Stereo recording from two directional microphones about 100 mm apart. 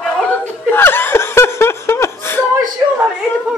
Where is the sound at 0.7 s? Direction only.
20° left (ahead or behind).